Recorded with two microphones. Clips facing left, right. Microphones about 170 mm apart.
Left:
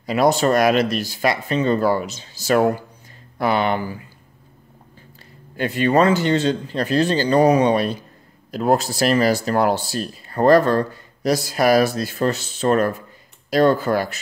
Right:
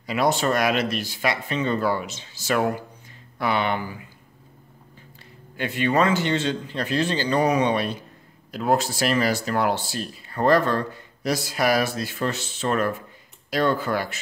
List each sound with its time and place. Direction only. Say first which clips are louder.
0.0 s speech: left 5 dB; 40° left (ahead or behind)
5.6 s speech: left 5 dB; 40° left (ahead or behind)